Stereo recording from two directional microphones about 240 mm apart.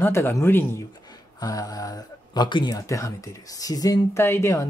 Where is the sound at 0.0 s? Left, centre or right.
Centre.